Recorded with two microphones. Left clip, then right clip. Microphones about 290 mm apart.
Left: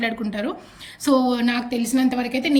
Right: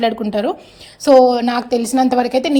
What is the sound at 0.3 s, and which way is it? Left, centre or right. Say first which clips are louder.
A woman's voice: right 9 dB; centre.